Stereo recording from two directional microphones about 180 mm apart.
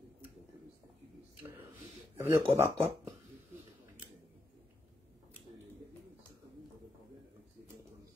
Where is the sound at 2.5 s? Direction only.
10° right (ahead or behind).